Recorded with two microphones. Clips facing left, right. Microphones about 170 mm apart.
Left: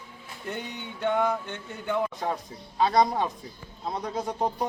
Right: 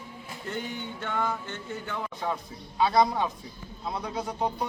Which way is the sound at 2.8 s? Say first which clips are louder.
Left 1 dB; 45° left (ahead or behind).